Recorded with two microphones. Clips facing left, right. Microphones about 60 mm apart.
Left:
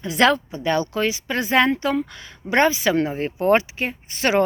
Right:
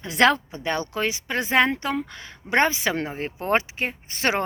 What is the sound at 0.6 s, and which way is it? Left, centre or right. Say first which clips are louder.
Speech: left 4 dB; right.